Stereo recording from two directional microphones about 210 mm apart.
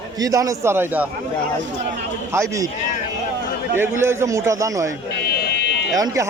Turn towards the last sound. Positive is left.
turn(degrees=-15)  # may be behind; listen again after turning